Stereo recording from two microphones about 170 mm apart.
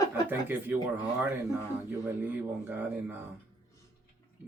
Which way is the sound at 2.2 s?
10° right (ahead or behind).